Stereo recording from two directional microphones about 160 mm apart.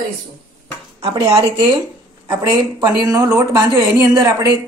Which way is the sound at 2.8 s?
20° right (ahead or behind).